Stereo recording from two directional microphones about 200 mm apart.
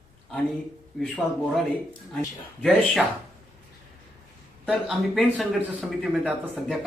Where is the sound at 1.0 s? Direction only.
Centre (ahead or behind).